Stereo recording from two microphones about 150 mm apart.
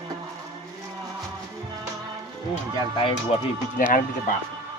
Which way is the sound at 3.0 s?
35° left (ahead or behind).